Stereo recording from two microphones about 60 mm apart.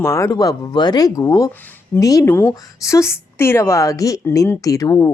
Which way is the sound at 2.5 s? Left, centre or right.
Left.